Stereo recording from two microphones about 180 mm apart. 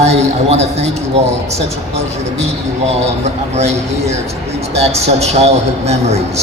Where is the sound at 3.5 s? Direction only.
35° right (ahead or behind).